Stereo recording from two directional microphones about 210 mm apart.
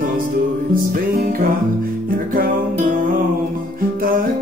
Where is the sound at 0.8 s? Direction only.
40° right (ahead or behind).